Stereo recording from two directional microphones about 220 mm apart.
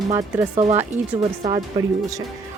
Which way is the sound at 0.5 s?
25° right (ahead or behind).